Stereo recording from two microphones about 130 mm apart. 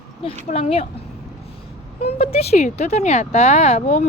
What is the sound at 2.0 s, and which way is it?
Speech, 50° left (ahead or behind).